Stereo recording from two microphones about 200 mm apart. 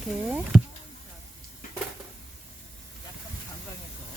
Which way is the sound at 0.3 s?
5° right (ahead or behind).